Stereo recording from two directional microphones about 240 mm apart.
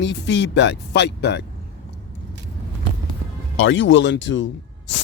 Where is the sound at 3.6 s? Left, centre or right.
Left.